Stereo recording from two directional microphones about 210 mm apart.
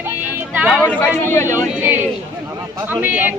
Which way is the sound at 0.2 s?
10° right (ahead or behind).